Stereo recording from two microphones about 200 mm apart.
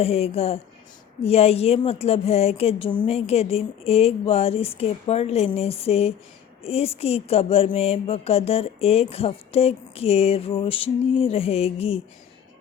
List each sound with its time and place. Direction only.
0.0 s a woman's voice: 30° left (ahead or behind)